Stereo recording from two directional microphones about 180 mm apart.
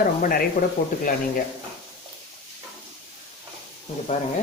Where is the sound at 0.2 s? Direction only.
55° left (ahead or behind).